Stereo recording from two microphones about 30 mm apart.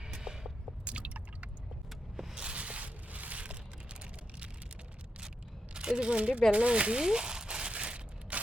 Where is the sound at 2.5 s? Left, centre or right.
Right.